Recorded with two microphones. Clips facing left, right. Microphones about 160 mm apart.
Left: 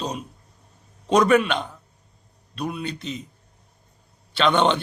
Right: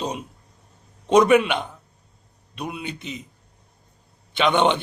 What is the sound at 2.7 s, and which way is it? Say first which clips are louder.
Speech: left 2 dB; 20° right (ahead or behind).